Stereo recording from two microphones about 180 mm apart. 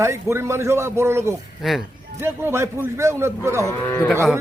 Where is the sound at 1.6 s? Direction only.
Centre (ahead or behind).